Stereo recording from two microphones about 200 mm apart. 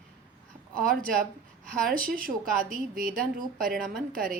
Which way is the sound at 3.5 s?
45° right (ahead or behind).